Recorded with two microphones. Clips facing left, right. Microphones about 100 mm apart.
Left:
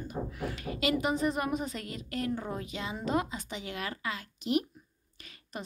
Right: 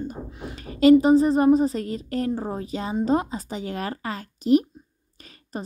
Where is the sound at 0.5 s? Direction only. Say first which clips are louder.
Right 17 dB; 35° right (ahead or behind).